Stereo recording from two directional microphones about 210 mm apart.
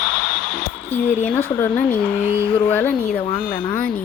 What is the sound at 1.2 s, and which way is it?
Speech, 10° left (ahead or behind).